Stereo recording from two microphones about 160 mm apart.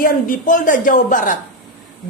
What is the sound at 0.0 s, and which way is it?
A woman's voice, 55° left (ahead or behind).